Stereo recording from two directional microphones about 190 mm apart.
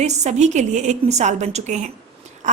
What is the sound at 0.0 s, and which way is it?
Speech, 35° right (ahead or behind).